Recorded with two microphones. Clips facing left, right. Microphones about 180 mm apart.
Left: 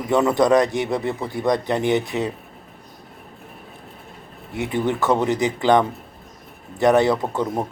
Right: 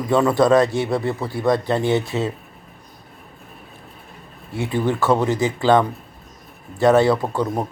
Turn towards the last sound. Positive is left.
turn(degrees=20)  # may be behind; listen again after turning